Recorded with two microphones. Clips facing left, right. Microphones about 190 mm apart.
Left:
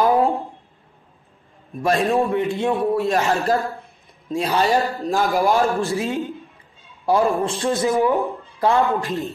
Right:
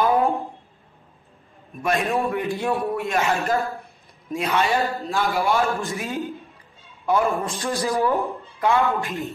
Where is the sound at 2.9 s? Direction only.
35° left (ahead or behind); by 8.2 s 15° left (ahead or behind).